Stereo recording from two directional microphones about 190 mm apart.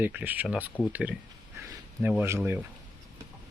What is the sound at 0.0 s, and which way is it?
Speech, 10° right (ahead or behind).